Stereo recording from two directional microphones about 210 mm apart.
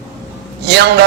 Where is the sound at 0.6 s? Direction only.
50° right (ahead or behind).